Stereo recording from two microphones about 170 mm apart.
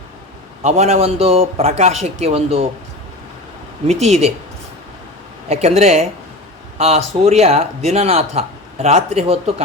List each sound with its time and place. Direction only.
0.6 s speech: 40° right (ahead or behind)
4.0 s speech: 40° right (ahead or behind)
5.5 s speech: 40° right (ahead or behind)